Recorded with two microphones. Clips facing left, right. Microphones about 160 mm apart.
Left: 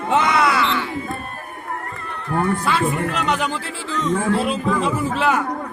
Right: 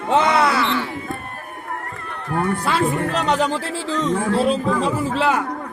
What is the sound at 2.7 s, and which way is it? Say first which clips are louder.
Speech: right 1 dB; 35° right (ahead or behind).